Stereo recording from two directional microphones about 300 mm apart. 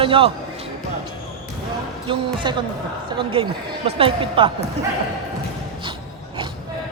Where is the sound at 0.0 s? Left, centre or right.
Centre.